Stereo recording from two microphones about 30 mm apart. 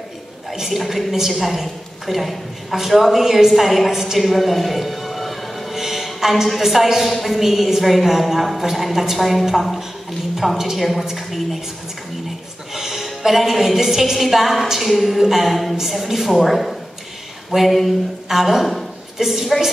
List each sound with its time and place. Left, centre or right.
0.5 s speech: centre
1.1 s a woman's voice: centre
1.4 s a man's voice: centre
12.7 s a woman's voice: centre
19.1 s a woman's voice: centre